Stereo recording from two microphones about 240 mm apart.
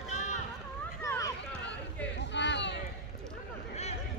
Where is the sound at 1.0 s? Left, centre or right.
Centre.